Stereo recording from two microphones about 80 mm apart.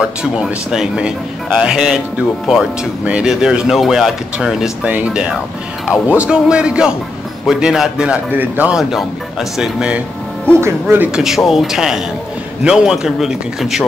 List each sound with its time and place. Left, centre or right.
0.0 s speech: centre
4.8 s speech: centre
8.3 s speech: right
8.7 s speech: centre
10.6 s speech: right
11.1 s speech: centre